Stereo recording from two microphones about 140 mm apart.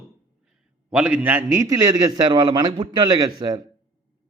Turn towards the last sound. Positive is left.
turn(degrees=-30)  # may be behind; listen again after turning